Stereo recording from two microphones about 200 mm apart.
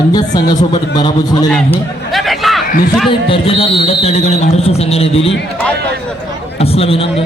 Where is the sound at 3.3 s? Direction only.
30° left (ahead or behind).